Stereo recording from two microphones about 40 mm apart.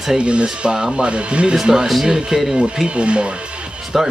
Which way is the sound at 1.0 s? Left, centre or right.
Right.